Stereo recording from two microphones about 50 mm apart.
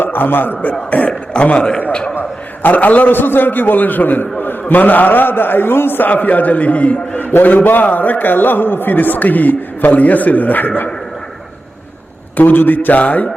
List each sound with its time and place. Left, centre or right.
0.0 s a man's voice: left
0.7 s a man's voice: left
2.6 s a man's voice: left
12.4 s a man's voice: left